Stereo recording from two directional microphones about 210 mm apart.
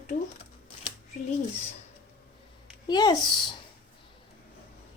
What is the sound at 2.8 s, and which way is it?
Speech, 20° left (ahead or behind).